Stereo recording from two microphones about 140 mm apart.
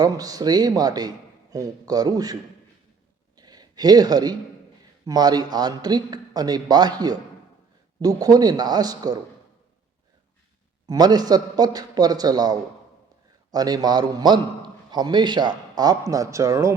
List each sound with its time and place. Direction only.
0.0 s a man's voice: 25° right (ahead or behind)
3.3 s a sound: 30° right (ahead or behind)
5.0 s a man's voice: 30° right (ahead or behind)
8.0 s a man's voice: 25° right (ahead or behind)
10.8 s a man's voice: 30° right (ahead or behind)